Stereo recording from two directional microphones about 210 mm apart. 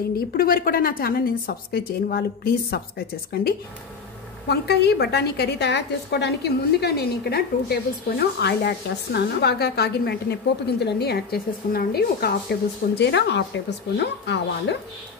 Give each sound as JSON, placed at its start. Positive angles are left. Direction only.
{"t": 0.4, "sound": "a woman's voice", "side_deg": 45}
{"t": 4.5, "sound": "a woman's voice", "side_deg": 50}